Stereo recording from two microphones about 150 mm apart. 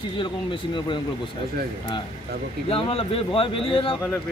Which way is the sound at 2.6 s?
40° left (ahead or behind).